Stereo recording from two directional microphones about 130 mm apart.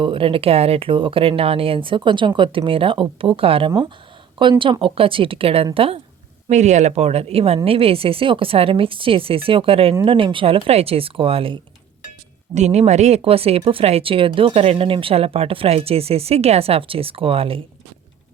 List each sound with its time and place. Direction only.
0.0 s speech: 40° right (ahead or behind)
6.5 s speech: 65° right (ahead or behind); by 11.6 s 45° right (ahead or behind)
12.5 s speech: 60° right (ahead or behind)